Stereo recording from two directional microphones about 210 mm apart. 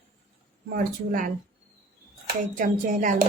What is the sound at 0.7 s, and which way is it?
Speech, 40° right (ahead or behind).